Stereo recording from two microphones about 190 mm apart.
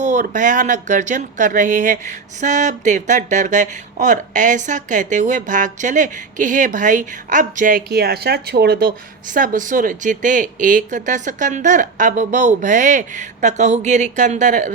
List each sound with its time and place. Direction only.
0.0 s speech: 40° right (ahead or behind); by 8.9 s 55° right (ahead or behind)
9.3 s speech: 45° right (ahead or behind)